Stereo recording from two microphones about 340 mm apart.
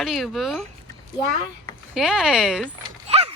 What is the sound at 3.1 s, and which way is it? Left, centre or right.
Clip-clop, centre.